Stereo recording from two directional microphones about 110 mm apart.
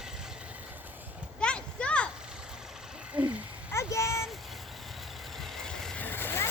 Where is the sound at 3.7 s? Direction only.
25° left (ahead or behind).